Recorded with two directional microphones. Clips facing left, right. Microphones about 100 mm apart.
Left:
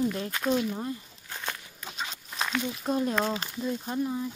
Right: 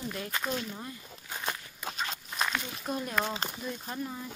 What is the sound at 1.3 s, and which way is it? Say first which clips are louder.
Walk: right 1 dB; 10° right (ahead or behind).